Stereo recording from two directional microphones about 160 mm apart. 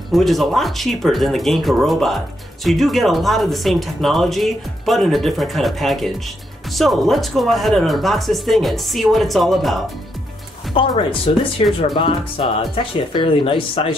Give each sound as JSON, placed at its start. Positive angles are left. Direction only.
{"t": 0.1, "sound": "speech", "side_deg": 0}
{"t": 10.7, "sound": "speech", "side_deg": 35}